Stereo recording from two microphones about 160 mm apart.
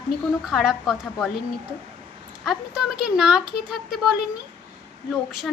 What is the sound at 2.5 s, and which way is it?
Speech, 5° right (ahead or behind).